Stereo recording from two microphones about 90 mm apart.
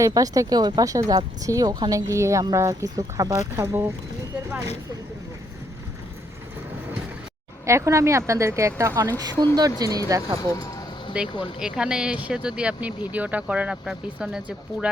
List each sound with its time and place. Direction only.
0.0 s speech: 40° right (ahead or behind)
7.6 s speech: 30° right (ahead or behind)
9.1 s speech: 50° right (ahead or behind)
10.1 s speech: 35° right (ahead or behind)
10.5 s speech: 40° left (ahead or behind)
11.1 s speech: 15° right (ahead or behind)